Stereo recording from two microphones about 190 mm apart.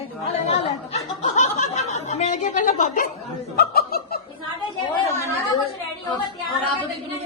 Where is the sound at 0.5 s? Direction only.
35° left (ahead or behind).